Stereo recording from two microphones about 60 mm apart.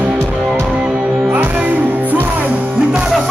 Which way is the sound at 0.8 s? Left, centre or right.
Centre.